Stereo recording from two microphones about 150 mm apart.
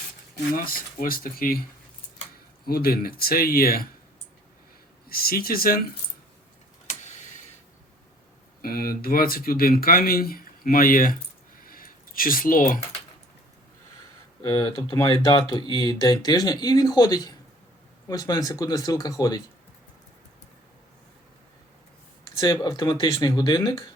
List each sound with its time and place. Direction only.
0.5 s speech: 70° left (ahead or behind)
2.6 s speech: 90° left
5.0 s speech: 80° left
6.8 s tick-tock: 55° left (ahead or behind)
8.6 s speech: 75° left (ahead or behind)
14.4 s speech: 20° left (ahead or behind)
15.3 s speech: 30° left (ahead or behind)
22.2 s speech: 25° left (ahead or behind)